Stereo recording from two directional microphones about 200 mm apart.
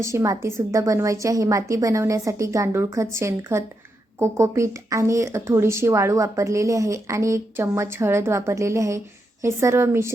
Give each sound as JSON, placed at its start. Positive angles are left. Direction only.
{"t": 0.0, "sound": "speech", "side_deg": -15}